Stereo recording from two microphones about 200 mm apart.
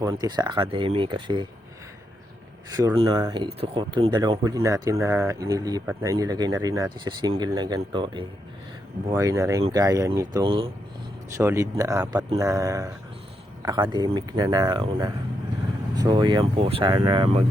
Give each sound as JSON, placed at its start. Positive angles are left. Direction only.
{"t": 0.0, "sound": "speech", "side_deg": -15}
{"t": 2.7, "sound": "speech", "side_deg": -20}
{"t": 11.3, "sound": "speech", "side_deg": -15}